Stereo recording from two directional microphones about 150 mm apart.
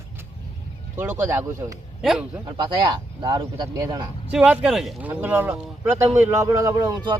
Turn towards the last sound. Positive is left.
turn(degrees=-25)  # may be behind; listen again after turning